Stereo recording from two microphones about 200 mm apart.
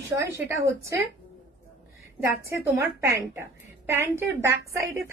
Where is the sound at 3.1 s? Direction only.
15° right (ahead or behind).